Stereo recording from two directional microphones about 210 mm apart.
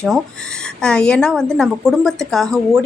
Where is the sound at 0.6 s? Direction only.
5° left (ahead or behind).